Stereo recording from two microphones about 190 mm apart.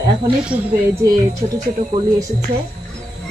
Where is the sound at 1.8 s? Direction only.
35° right (ahead or behind).